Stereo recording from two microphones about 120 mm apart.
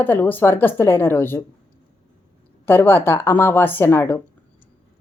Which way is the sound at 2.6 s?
20° left (ahead or behind).